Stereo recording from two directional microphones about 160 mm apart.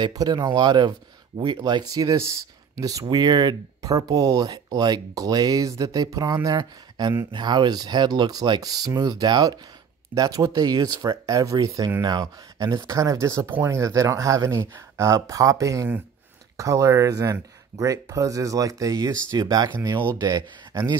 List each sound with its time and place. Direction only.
0.0 s speech: 25° right (ahead or behind)